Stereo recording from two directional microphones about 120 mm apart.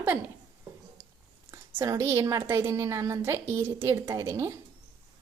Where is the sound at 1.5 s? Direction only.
25° right (ahead or behind).